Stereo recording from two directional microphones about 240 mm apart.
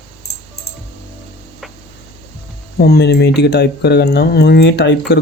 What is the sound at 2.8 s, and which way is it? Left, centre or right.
Speech, left.